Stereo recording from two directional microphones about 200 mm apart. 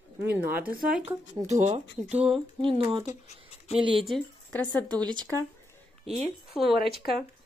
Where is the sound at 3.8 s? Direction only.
25° right (ahead or behind).